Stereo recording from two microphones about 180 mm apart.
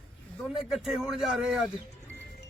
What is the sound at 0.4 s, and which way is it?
A man's voice, centre (ahead or behind).